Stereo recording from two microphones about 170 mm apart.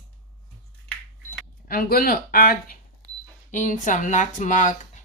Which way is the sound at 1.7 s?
60° left (ahead or behind).